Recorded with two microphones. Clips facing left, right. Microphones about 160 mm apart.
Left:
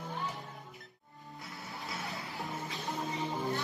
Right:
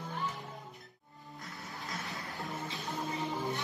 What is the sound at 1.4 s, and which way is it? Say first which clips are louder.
Music: left 1 dB; centre (ahead or behind).